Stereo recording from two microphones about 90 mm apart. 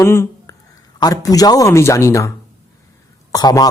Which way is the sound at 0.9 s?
45° left (ahead or behind).